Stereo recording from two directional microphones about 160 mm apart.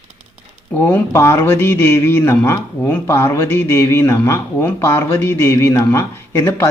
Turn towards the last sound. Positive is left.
turn(degrees=15)  # may be behind; listen again after turning